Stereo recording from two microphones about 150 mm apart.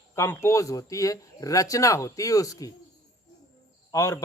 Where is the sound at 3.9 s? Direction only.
20° left (ahead or behind).